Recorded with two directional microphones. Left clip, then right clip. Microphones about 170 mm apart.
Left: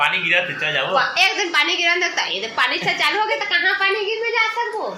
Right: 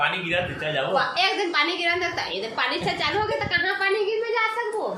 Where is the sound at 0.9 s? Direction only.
10° left (ahead or behind).